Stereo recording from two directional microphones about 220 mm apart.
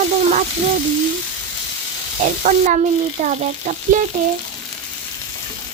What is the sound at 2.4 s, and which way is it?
Frying, 35° right (ahead or behind).